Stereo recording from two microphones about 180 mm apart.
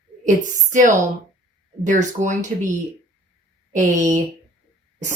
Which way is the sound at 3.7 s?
45° right (ahead or behind).